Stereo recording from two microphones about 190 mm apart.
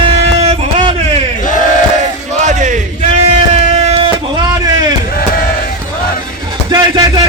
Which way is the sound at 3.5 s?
35° right (ahead or behind).